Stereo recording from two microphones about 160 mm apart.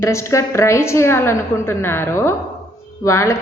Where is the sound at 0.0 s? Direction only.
15° left (ahead or behind).